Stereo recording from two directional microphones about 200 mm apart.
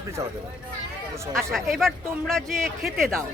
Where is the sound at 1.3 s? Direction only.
Centre (ahead or behind).